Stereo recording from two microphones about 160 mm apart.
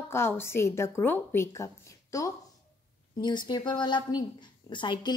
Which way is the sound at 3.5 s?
30° left (ahead or behind).